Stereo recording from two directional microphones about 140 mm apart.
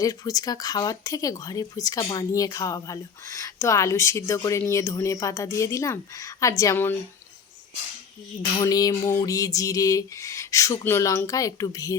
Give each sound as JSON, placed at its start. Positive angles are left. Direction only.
{"t": 0.0, "sound": "speech", "side_deg": 25}
{"t": 8.4, "sound": "speech", "side_deg": 30}